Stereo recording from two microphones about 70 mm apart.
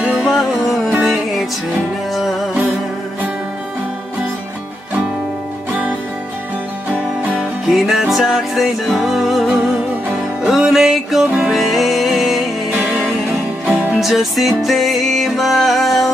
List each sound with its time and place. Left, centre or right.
0.0 s music: centre
5.7 s music: right
7.3 s music: centre
13.7 s music: centre